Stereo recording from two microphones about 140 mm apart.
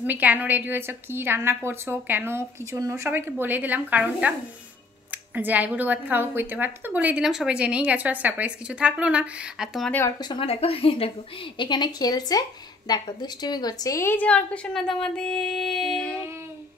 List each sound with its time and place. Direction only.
0.0 s a woman's voice: 10° right (ahead or behind)
5.3 s a woman's voice: 10° right (ahead or behind)
9.8 s a woman's voice: 15° left (ahead or behind)
10.2 s a woman's voice: 40° left (ahead or behind); by 16.2 s 5° left (ahead or behind)